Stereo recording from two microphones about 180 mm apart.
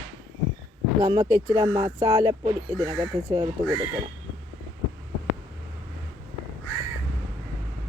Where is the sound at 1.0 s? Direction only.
20° right (ahead or behind).